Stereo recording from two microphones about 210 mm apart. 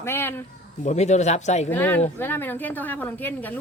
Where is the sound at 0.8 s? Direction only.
30° left (ahead or behind).